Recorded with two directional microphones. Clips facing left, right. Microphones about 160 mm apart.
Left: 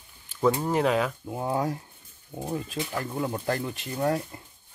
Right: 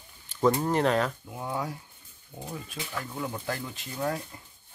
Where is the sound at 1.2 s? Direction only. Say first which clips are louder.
Left 6 dB; 35° left (ahead or behind).